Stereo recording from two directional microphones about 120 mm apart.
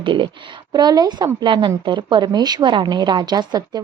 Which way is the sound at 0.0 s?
45° right (ahead or behind).